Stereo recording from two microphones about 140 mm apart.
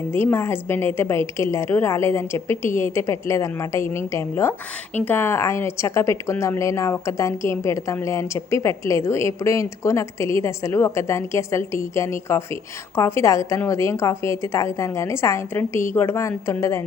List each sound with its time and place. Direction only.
0.1 s a woman's voice: 15° left (ahead or behind)